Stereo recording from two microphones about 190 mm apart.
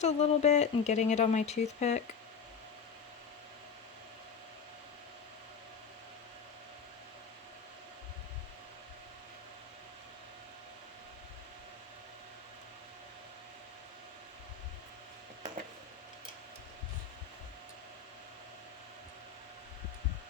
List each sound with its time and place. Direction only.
0.0 s speech: 35° left (ahead or behind)